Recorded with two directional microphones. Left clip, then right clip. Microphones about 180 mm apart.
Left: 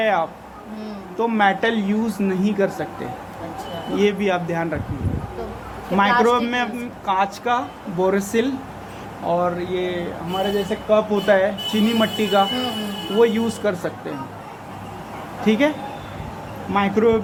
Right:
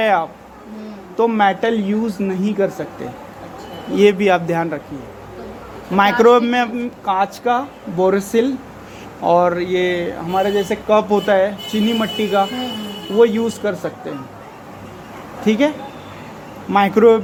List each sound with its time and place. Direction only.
0.0 s a man's voice: 35° right (ahead or behind); by 2.8 s 20° right (ahead or behind)
3.9 s a man's voice: 35° right (ahead or behind)
6.2 s a man's voice: 35° right (ahead or behind)
9.2 s speech: 55° right (ahead or behind)
11.1 s a man's voice: 30° right (ahead or behind)
15.4 s a man's voice: 25° right (ahead or behind)
16.7 s a man's voice: 35° right (ahead or behind)